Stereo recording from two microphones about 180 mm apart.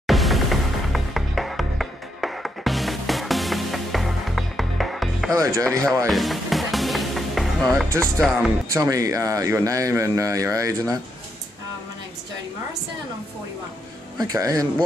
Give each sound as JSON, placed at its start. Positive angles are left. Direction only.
{"t": 0.0, "sound": "music", "side_deg": 0}
{"t": 5.3, "sound": "speech", "side_deg": -20}
{"t": 6.0, "sound": "music", "side_deg": 0}
{"t": 8.0, "sound": "speech", "side_deg": 0}
{"t": 8.7, "sound": "speech", "side_deg": -20}
{"t": 14.1, "sound": "speech", "side_deg": -20}